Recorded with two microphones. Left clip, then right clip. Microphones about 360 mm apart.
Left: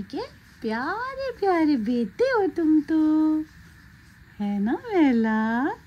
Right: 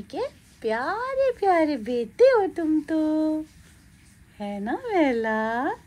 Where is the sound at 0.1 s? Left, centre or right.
Centre.